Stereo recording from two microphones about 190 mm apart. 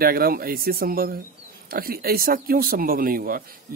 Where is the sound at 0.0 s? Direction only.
50° right (ahead or behind).